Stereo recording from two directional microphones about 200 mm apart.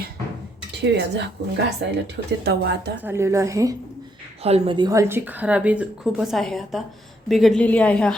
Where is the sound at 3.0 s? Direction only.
15° right (ahead or behind).